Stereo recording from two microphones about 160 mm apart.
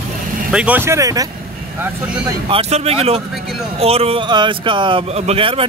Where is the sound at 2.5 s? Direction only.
40° right (ahead or behind).